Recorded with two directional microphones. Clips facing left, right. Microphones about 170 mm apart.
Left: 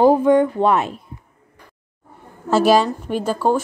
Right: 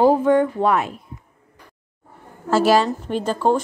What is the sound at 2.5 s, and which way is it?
Speech, 15° left (ahead or behind).